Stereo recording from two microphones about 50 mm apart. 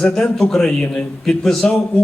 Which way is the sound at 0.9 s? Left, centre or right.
Centre.